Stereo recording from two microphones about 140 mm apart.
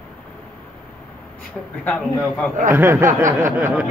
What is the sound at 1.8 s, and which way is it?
Speech, 10° left (ahead or behind).